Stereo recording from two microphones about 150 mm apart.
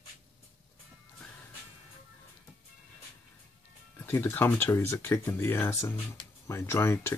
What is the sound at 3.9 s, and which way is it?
Speech, 15° left (ahead or behind).